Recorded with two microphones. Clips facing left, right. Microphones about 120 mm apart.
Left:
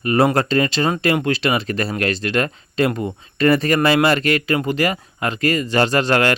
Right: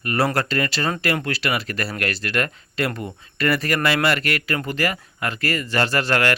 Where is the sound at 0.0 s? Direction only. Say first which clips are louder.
Left 5 dB; 20° left (ahead or behind).